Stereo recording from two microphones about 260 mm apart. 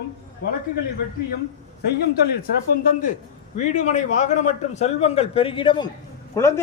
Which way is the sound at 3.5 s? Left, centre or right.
Left.